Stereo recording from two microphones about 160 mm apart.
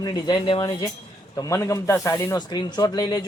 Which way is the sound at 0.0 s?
25° left (ahead or behind).